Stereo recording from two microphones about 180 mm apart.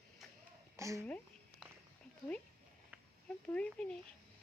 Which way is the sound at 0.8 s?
15° right (ahead or behind).